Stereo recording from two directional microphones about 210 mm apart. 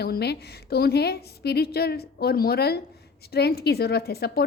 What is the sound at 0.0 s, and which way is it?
A woman's voice, 50° left (ahead or behind).